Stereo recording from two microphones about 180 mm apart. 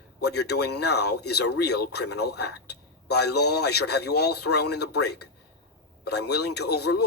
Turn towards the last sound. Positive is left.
turn(degrees=65)  # may be behind; listen again after turning